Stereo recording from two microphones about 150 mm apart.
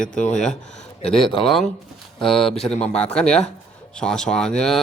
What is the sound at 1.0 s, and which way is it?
Speech, 40° left (ahead or behind).